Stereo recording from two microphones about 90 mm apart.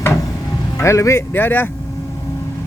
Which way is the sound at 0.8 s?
35° left (ahead or behind).